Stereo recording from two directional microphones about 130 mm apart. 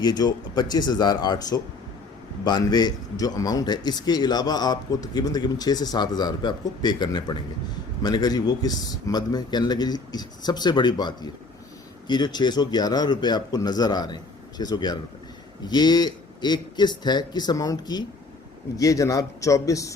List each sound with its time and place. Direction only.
0.0 s a man's voice: 30° left (ahead or behind)